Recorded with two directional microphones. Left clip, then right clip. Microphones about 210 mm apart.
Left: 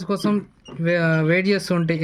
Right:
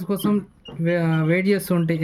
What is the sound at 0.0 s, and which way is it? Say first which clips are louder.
Speech: left 1 dB; centre (ahead or behind).